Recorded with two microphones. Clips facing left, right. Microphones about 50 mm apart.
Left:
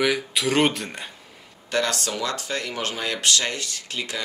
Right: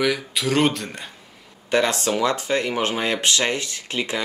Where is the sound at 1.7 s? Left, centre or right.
Right.